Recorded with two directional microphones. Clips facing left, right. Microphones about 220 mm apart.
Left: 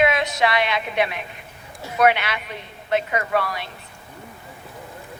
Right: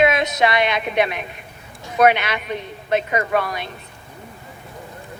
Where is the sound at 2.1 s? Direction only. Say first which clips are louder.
Right 3 dB; 20° right (ahead or behind).